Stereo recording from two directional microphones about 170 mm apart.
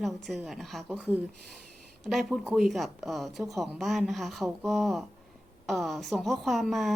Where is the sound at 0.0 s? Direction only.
Centre (ahead or behind).